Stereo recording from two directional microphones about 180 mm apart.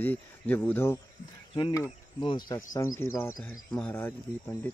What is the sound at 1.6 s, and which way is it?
Speech, 25° left (ahead or behind).